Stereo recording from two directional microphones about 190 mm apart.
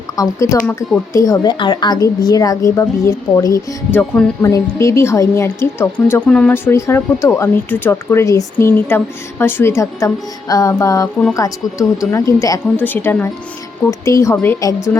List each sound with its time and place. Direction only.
0.2 s a woman's voice: 15° left (ahead or behind)